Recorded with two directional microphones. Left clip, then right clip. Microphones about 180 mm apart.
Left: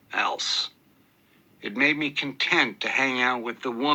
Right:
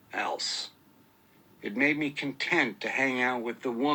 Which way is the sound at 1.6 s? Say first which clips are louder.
Left 4 dB; 30° left (ahead or behind).